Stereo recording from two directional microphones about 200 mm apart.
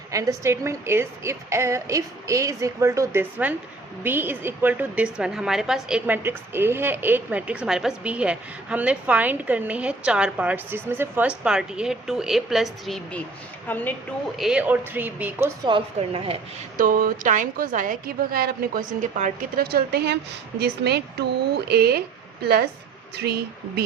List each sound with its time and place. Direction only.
0.1 s a woman's voice: 15° right (ahead or behind); by 13.9 s 10° left (ahead or behind)
14.3 s a woman's voice: 5° right (ahead or behind)
15.7 s speech: 30° right (ahead or behind)
16.7 s a woman's voice: 45° right (ahead or behind)
23.1 s a woman's voice: 55° right (ahead or behind)